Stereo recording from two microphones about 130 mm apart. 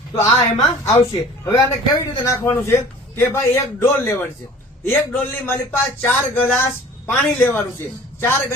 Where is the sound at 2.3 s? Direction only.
20° left (ahead or behind).